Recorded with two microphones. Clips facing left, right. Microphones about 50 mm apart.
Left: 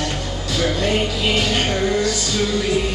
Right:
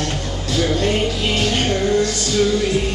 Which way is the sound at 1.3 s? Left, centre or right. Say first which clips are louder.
Right 1 dB; left.